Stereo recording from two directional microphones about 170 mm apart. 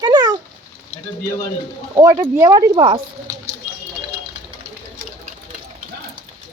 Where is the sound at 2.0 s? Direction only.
20° right (ahead or behind).